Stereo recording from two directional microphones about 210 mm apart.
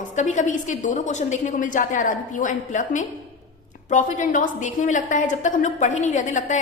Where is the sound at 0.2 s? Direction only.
35° left (ahead or behind).